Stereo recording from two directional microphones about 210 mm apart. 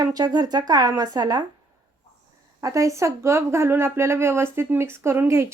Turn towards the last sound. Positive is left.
turn(degrees=-10)  # may be behind; listen again after turning